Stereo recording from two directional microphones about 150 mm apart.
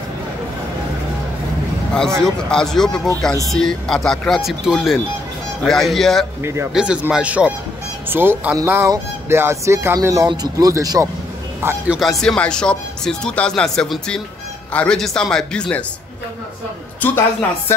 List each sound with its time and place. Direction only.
2.2 s speech: 5° left (ahead or behind)
6.4 s speech: 15° right (ahead or behind)
12.0 s speech: centre (ahead or behind)
17.0 s speech: 10° left (ahead or behind)